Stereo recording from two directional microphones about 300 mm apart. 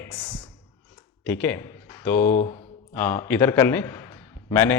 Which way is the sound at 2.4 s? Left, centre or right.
Centre.